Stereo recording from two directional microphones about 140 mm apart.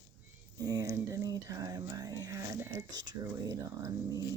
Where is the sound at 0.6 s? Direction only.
25° right (ahead or behind).